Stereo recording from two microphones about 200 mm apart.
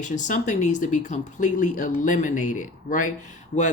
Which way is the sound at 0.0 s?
40° left (ahead or behind).